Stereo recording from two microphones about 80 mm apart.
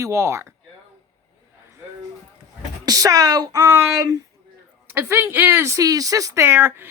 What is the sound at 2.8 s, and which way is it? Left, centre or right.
Speech, right.